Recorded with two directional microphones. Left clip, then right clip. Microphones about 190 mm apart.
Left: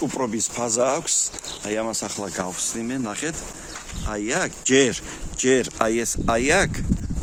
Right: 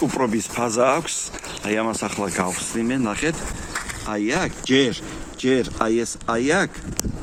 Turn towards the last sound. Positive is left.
turn(degrees=60)  # may be behind; listen again after turning